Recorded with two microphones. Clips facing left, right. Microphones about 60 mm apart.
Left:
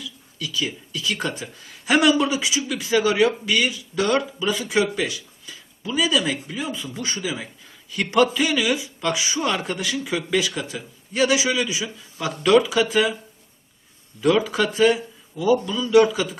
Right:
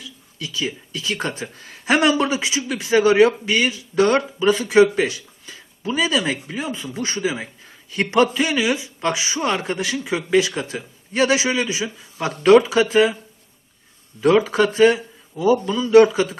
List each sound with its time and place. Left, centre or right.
0.0 s a man's voice: right
14.2 s speech: right